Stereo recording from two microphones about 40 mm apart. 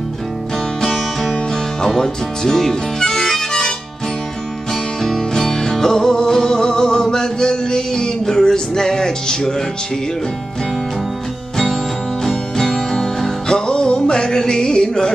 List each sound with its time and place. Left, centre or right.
0.8 s music: centre
5.0 s music: centre
11.5 s music: centre